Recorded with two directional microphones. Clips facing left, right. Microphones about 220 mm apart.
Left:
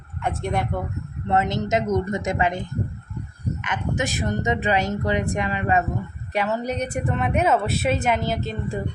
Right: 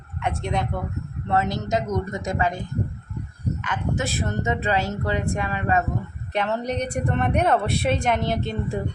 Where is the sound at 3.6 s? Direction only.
20° left (ahead or behind).